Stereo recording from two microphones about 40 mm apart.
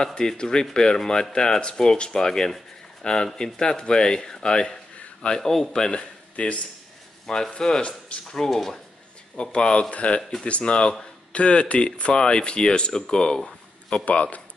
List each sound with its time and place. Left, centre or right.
0.0 s speech: centre
5.4 s speech: centre
5.7 s speech: left
7.2 s speech: centre
9.4 s speech: left
14.0 s speech: left